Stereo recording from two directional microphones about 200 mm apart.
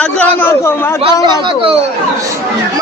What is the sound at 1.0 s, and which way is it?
Speech, 25° right (ahead or behind).